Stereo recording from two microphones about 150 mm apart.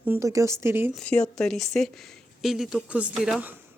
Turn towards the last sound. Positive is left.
turn(degrees=-5)  # may be behind; listen again after turning